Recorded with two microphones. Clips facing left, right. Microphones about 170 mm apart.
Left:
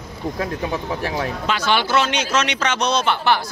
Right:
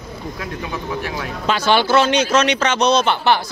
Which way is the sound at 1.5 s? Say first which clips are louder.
Right 5 dB; 35° right (ahead or behind).